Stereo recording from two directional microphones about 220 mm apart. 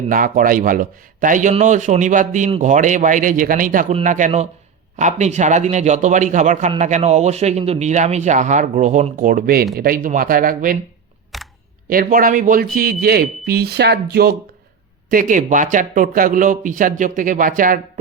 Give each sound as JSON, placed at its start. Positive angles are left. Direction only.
{"t": 0.1, "sound": "a man's voice", "side_deg": -40}
{"t": 11.3, "sound": "camera", "side_deg": 0}
{"t": 11.9, "sound": "a man's voice", "side_deg": -40}